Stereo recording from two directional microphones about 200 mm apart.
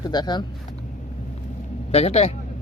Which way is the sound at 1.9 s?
30° left (ahead or behind).